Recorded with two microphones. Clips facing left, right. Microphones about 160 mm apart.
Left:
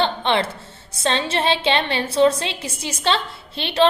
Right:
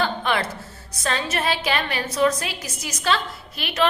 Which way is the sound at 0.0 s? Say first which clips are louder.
Left 3 dB; 30° left (ahead or behind).